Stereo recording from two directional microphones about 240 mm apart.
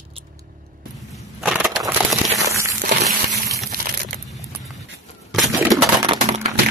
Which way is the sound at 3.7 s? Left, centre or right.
Right.